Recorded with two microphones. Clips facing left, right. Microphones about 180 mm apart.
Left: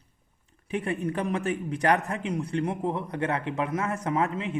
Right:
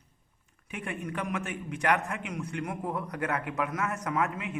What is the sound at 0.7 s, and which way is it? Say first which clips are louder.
A man's voice: left 7 dB; 35° left (ahead or behind).